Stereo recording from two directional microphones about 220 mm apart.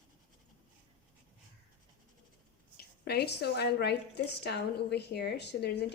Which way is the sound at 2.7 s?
45° left (ahead or behind).